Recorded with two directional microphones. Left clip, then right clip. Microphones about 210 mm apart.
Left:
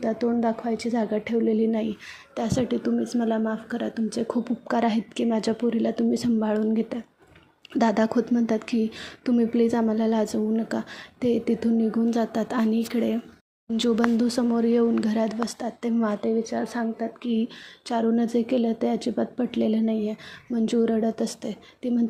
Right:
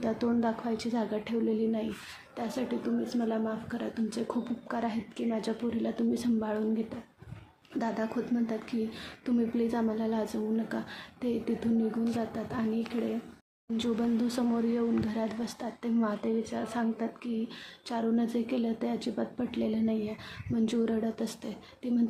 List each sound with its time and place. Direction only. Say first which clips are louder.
0.0 s a woman's voice: left 6 dB; 20° left (ahead or behind)